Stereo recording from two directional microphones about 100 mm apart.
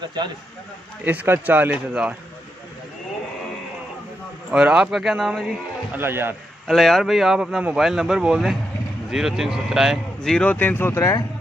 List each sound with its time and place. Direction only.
1.0 s a man's voice: 20° right (ahead or behind)
4.5 s speech: 10° right (ahead or behind)
5.9 s a man's voice: 20° right (ahead or behind)
6.7 s speech: centre (ahead or behind)
10.3 s speech: 15° left (ahead or behind)